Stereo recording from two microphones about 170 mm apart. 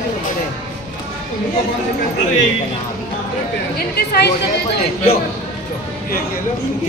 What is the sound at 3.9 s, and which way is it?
Speech, 65° left (ahead or behind).